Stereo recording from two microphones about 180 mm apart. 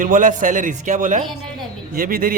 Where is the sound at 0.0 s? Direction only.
45° right (ahead or behind).